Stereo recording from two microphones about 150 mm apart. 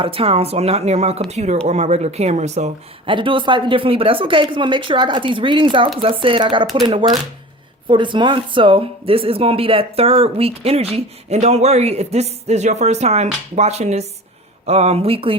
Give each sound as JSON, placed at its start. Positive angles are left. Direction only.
{"t": 0.0, "sound": "speech", "side_deg": -40}
{"t": 3.1, "sound": "speech", "side_deg": -35}
{"t": 7.9, "sound": "speech", "side_deg": -30}